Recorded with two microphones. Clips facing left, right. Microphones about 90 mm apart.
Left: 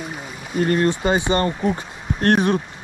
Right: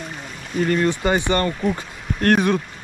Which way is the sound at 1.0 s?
20° left (ahead or behind).